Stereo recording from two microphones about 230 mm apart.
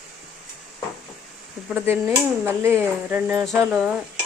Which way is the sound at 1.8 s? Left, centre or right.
Centre.